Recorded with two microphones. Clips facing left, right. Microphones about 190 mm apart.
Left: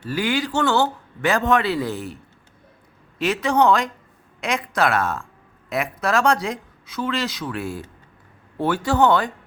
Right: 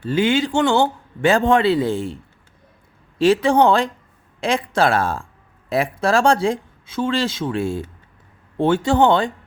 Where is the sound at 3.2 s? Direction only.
30° right (ahead or behind).